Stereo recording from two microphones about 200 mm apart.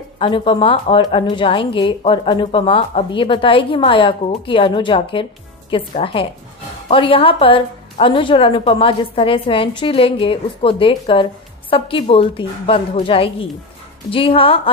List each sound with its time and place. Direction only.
0.2 s a woman's voice: 25° left (ahead or behind)